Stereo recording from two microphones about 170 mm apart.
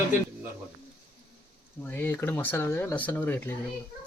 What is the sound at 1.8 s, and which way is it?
Speech, 10° left (ahead or behind).